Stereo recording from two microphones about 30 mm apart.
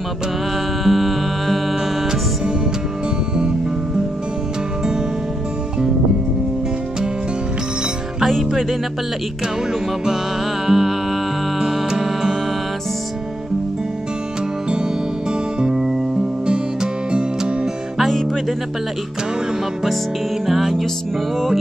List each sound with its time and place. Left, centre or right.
0.8 s music: centre
10.7 s music: centre
15.6 s music: centre
16.4 s music: right
20.4 s music: centre